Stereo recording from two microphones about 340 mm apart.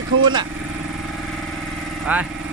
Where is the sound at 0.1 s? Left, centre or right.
Right.